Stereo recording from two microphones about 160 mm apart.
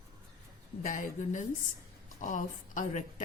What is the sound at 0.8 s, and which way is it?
A woman's voice, 55° left (ahead or behind).